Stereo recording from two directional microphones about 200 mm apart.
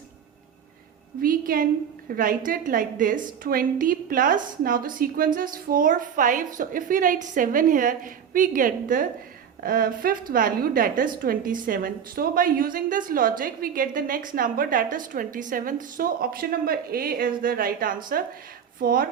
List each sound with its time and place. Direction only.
1.2 s a woman's voice: 45° right (ahead or behind)